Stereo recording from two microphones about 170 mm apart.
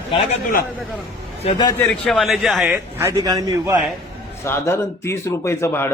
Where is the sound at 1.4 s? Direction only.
30° left (ahead or behind).